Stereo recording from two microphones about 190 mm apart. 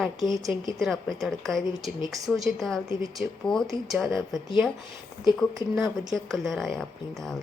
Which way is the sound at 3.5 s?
25° left (ahead or behind).